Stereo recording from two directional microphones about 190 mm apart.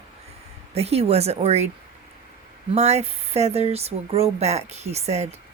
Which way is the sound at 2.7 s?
35° right (ahead or behind).